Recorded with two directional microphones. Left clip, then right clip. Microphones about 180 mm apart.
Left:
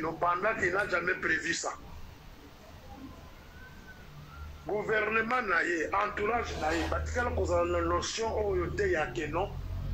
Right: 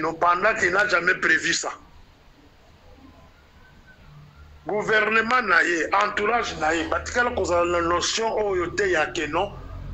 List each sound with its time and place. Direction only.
0.0 s a man's voice: 30° right (ahead or behind)
4.6 s a man's voice: 30° right (ahead or behind)